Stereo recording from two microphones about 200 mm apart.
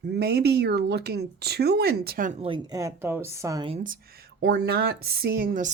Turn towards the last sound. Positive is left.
turn(degrees=-45)  # may be behind; listen again after turning